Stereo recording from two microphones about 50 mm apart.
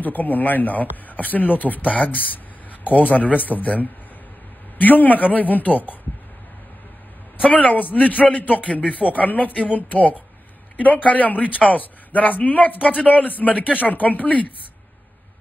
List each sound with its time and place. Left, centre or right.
0.0 s speech: left
7.4 s speech: left